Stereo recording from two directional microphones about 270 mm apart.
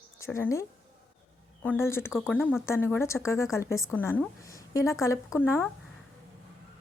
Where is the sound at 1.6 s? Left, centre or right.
Centre.